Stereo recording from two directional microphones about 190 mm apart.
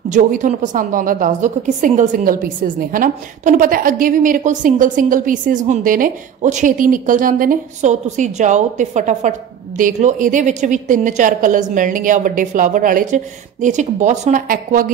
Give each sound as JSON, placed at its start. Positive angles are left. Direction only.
{"t": 0.1, "sound": "a woman's voice", "side_deg": -40}